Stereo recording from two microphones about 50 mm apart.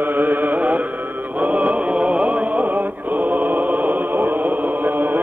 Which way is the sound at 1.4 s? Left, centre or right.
Right.